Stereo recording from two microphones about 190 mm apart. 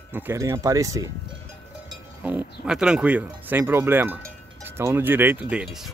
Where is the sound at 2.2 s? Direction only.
10° right (ahead or behind).